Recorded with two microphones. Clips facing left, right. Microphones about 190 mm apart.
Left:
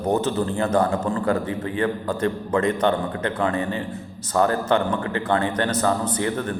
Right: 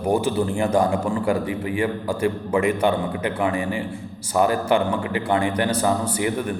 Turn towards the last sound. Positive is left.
turn(degrees=-15)  # may be behind; listen again after turning